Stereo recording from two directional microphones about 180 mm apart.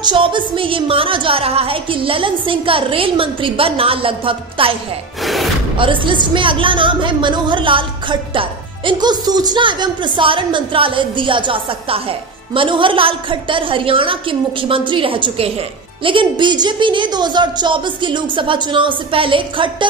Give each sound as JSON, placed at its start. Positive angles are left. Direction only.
{"t": 0.0, "sound": "a woman's voice", "side_deg": -25}
{"t": 5.2, "sound": "music", "side_deg": 0}
{"t": 5.8, "sound": "a woman's voice", "side_deg": -30}